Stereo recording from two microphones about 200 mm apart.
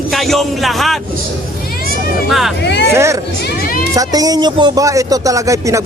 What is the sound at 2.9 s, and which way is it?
Speech, 15° right (ahead or behind).